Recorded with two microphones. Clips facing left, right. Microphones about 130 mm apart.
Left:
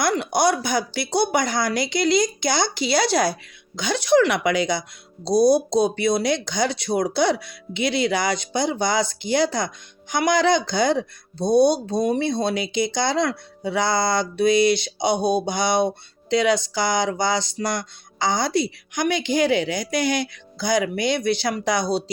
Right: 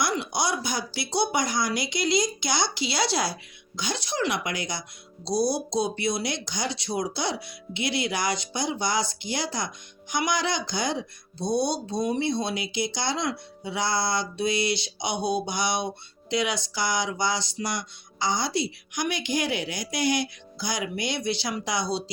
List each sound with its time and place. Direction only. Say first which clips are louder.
0.0 s speech: left 7 dB; 55° left (ahead or behind)
16.4 s music: left 8 dB; 55° left (ahead or behind)